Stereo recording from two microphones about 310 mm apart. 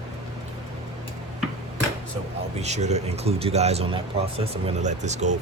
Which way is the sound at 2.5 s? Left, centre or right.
Right.